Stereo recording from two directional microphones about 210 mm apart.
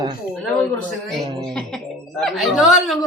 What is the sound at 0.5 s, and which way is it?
Speech, 5° left (ahead or behind).